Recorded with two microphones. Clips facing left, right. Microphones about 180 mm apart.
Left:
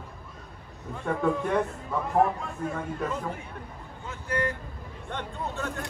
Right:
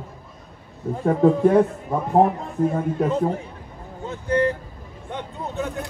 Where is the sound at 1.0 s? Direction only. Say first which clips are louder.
Right 10 dB; 35° right (ahead or behind).